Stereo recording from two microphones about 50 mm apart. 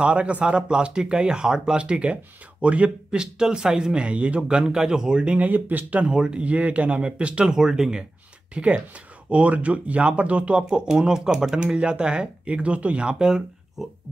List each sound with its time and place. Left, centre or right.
0.0 s speech: right
5.4 s speech: right
6.1 s speech: centre
6.4 s speech: right
7.5 s speech: centre
8.5 s speech: right
10.7 s speech: centre